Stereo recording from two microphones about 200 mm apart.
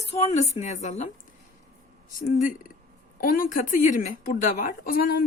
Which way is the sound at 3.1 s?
45° left (ahead or behind).